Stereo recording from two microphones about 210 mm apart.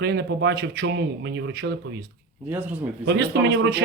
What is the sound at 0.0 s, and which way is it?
Speech, 50° right (ahead or behind).